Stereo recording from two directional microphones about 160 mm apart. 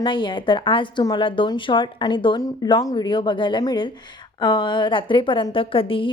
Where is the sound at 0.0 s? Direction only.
30° left (ahead or behind).